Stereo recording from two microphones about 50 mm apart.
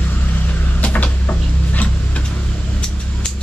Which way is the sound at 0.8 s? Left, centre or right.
Left.